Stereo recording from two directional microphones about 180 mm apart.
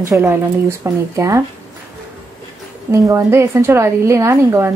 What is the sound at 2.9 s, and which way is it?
A woman's voice, 15° right (ahead or behind).